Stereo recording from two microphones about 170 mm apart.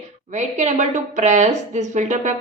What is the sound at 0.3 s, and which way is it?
A woman's voice, 45° right (ahead or behind).